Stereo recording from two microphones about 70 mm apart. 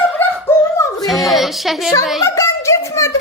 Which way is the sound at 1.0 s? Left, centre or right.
Centre.